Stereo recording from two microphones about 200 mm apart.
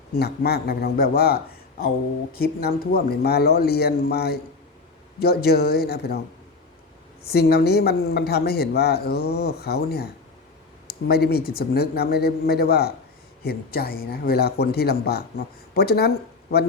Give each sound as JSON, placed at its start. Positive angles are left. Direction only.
{"t": 0.2, "sound": "speech", "side_deg": 50}
{"t": 2.4, "sound": "speech", "side_deg": 50}
{"t": 7.3, "sound": "speech", "side_deg": 55}